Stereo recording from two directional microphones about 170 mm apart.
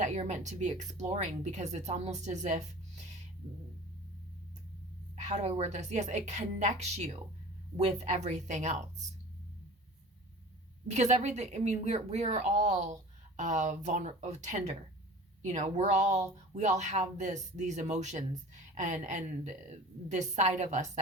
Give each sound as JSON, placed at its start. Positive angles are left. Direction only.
{"t": 0.0, "sound": "a woman's voice", "side_deg": -45}
{"t": 5.1, "sound": "a woman's voice", "side_deg": -40}
{"t": 10.8, "sound": "a woman's voice", "side_deg": -45}